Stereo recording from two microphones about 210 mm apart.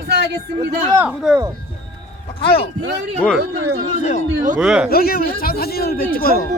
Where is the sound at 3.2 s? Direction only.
5° left (ahead or behind).